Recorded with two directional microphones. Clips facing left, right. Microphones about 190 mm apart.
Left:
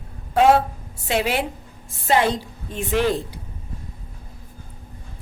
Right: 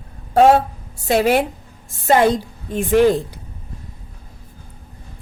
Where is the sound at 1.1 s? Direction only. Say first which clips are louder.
Right 6 dB; 45° right (ahead or behind).